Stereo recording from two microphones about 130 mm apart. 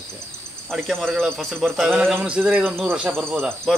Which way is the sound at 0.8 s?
5° left (ahead or behind).